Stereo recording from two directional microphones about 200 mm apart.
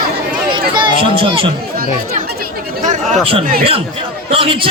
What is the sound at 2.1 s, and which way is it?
Chatter, 45° right (ahead or behind).